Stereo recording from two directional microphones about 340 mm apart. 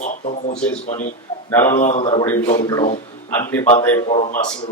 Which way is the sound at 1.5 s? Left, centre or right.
Centre.